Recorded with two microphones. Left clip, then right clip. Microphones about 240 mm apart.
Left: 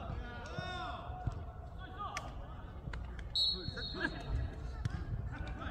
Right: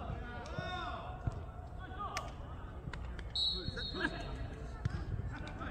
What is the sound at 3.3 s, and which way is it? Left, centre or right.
Basketball bounce, left.